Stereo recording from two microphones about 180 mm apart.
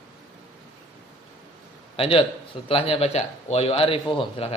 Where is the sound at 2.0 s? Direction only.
30° left (ahead or behind).